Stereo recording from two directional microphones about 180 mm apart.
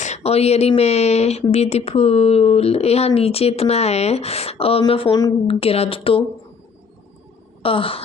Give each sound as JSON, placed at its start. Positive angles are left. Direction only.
{"t": 0.0, "sound": "speech", "side_deg": 35}
{"t": 7.6, "sound": "speech", "side_deg": 30}